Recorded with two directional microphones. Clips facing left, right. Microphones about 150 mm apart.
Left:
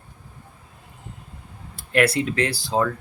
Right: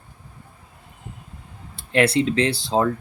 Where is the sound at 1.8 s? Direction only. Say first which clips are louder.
Right 2 dB; 25° right (ahead or behind).